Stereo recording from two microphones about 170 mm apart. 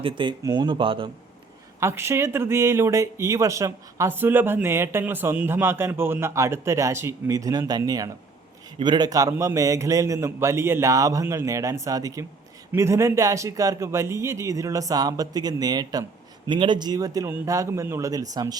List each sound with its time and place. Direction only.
0.0 s a man's voice: 30° right (ahead or behind)
1.8 s a man's voice: 15° right (ahead or behind)